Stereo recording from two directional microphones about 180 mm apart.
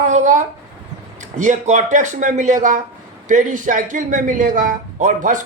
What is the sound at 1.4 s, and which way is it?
Speech, 45° right (ahead or behind).